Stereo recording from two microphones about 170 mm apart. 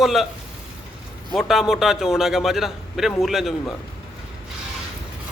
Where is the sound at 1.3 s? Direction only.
Centre (ahead or behind).